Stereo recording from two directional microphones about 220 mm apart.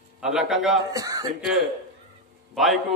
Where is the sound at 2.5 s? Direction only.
Centre (ahead or behind).